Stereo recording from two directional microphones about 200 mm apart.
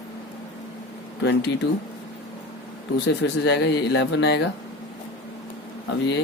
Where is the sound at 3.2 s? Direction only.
55° left (ahead or behind).